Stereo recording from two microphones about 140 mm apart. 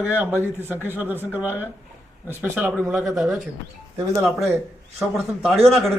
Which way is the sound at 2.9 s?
Centre (ahead or behind).